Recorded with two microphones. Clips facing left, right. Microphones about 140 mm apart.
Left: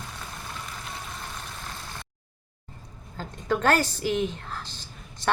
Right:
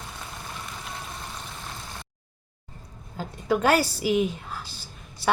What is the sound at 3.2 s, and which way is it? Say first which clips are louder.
A woman's voice: right 2 dB; 10° right (ahead or behind).